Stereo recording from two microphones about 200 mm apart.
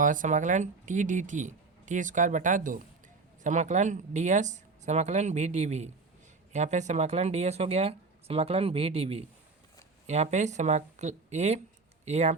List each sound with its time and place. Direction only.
0.0 s speech: 40° right (ahead or behind)